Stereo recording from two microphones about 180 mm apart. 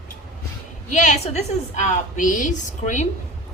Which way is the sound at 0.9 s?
40° left (ahead or behind).